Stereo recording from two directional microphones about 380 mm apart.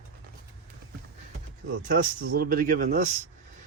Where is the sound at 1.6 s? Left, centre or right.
Right.